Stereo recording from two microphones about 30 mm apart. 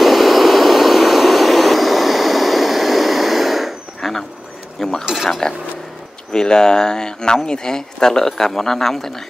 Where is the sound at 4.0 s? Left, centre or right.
Centre.